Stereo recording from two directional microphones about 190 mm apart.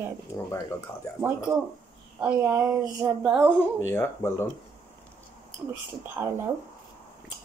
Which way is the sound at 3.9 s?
10° left (ahead or behind).